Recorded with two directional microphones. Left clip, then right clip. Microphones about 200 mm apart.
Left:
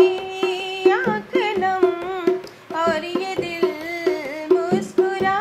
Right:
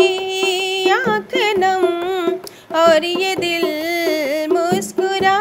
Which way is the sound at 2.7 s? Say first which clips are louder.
Right 9 dB; 55° right (ahead or behind).